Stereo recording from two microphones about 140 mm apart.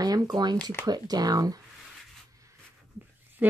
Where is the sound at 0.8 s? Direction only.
30° right (ahead or behind).